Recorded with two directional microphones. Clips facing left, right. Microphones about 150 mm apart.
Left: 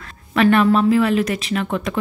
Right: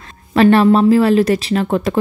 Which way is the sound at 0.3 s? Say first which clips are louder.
Right 4 dB; 30° right (ahead or behind).